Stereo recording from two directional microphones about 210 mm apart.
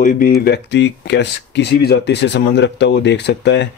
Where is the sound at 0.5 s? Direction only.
55° left (ahead or behind).